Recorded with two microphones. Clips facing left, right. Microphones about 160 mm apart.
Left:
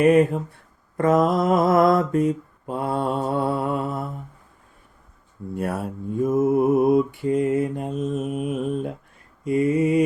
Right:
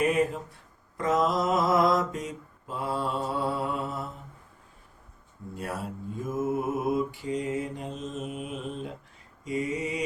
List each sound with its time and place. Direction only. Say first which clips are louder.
0.0 s mantra: left 9 dB; 55° left (ahead or behind)
5.5 s mantra: left 8 dB; 55° left (ahead or behind)